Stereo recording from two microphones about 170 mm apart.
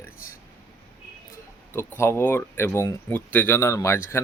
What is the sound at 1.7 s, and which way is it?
Speech, 15° left (ahead or behind).